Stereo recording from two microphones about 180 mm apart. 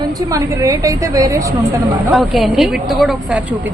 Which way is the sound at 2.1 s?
Centre (ahead or behind).